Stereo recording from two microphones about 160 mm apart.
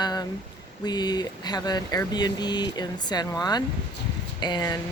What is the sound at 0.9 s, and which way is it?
Speech, 25° left (ahead or behind).